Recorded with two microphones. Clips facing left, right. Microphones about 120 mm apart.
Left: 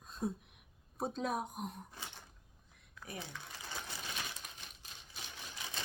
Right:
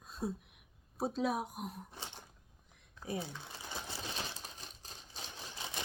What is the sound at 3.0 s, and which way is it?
Crumpling, 25° right (ahead or behind).